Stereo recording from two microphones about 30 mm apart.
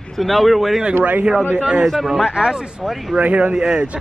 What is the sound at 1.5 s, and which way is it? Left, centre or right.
Speech, right.